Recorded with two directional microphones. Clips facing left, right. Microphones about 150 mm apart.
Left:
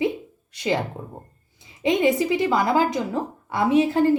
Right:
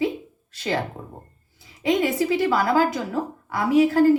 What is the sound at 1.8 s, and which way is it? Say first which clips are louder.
Speech: left 1 dB; 20° left (ahead or behind).